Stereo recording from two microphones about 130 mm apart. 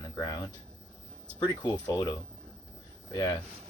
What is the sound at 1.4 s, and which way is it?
Speech, 30° left (ahead or behind).